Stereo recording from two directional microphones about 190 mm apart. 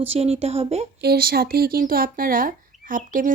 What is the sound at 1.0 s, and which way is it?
Speech, 55° right (ahead or behind).